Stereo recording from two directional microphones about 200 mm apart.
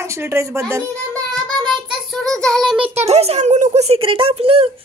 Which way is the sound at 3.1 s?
30° right (ahead or behind).